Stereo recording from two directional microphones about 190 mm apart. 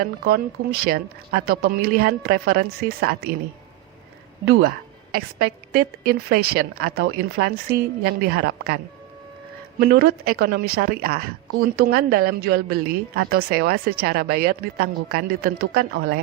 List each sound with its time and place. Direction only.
0.0 s speech: 55° right (ahead or behind)
5.1 s speech: 50° right (ahead or behind)